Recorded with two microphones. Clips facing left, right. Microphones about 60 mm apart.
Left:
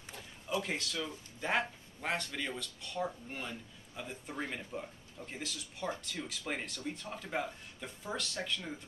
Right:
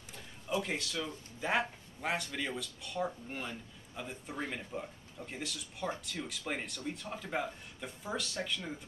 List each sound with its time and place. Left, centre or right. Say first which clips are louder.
0.1 s speech: right 1 dB; centre